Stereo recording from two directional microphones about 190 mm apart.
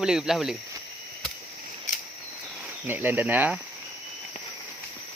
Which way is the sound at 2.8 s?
10° right (ahead or behind).